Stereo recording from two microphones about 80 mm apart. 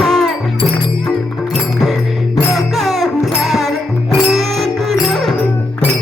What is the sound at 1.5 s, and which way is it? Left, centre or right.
Music, centre.